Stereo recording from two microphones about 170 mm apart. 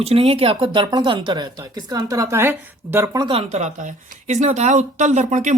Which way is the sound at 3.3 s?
40° right (ahead or behind).